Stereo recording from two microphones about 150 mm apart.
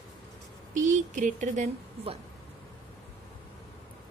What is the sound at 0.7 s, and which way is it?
Speech, 55° right (ahead or behind).